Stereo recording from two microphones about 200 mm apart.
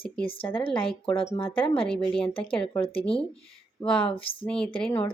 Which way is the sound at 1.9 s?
5° left (ahead or behind).